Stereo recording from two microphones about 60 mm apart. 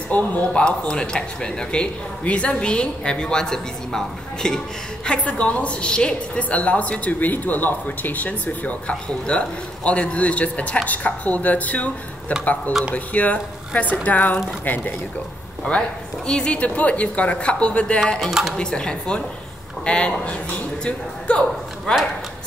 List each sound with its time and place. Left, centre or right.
0.1 s a woman's voice: left
0.5 s speech: centre
5.0 s a woman's voice: left